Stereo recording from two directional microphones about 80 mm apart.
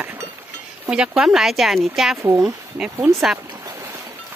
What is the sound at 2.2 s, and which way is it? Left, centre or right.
Speech, right.